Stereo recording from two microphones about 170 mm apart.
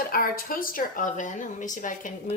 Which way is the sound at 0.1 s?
55° left (ahead or behind).